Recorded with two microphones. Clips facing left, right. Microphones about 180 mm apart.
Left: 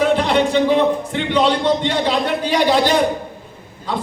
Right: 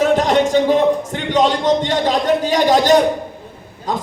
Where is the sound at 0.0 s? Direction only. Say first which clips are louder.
Right 2 dB; 45° right (ahead or behind).